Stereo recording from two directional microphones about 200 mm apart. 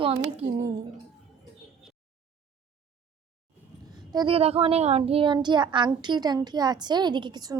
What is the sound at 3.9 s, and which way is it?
A child's voice, 20° right (ahead or behind).